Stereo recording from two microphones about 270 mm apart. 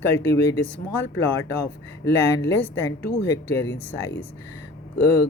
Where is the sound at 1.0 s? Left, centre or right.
Left.